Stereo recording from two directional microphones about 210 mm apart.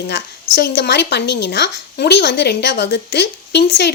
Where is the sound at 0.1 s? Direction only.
55° left (ahead or behind).